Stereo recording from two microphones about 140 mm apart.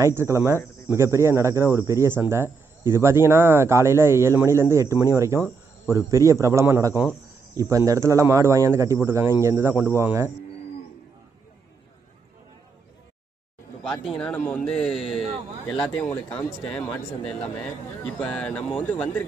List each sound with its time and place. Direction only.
0.0 s speech: 20° right (ahead or behind)
14.0 s a man's voice: centre (ahead or behind)
14.3 s speech: 15° left (ahead or behind)
16.0 s speech: 10° left (ahead or behind)